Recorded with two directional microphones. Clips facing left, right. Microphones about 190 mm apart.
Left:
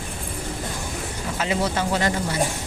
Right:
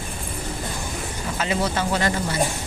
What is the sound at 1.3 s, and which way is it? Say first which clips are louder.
Speech: even; 15° left (ahead or behind).